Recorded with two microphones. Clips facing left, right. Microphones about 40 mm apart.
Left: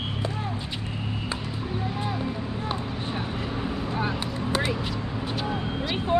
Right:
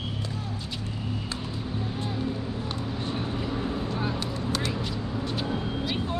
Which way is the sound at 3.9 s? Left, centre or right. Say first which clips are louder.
Left 2 dB; left.